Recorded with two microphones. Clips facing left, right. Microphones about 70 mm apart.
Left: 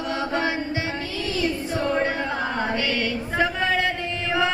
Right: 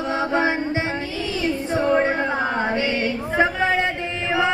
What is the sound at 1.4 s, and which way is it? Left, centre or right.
Child singing, right.